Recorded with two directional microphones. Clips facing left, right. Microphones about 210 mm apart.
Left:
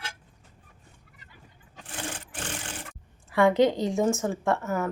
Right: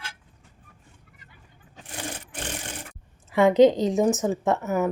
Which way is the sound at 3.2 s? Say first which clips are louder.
Right 4 dB; 20° right (ahead or behind).